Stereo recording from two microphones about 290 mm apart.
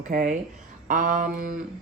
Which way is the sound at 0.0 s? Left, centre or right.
Right.